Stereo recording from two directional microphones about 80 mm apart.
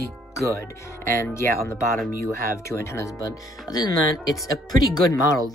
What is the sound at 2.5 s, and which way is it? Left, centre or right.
Speech, left.